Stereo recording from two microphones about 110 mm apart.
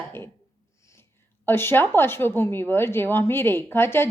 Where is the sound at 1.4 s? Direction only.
20° left (ahead or behind).